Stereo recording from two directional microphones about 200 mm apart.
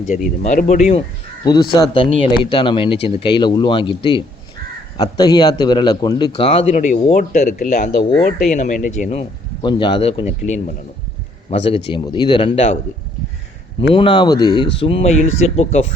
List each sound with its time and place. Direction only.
0.4 s speech: 40° left (ahead or behind)
1.7 s a man's voice: 25° left (ahead or behind)
13.9 s a man's voice: 25° left (ahead or behind)
14.8 s speech: 30° left (ahead or behind)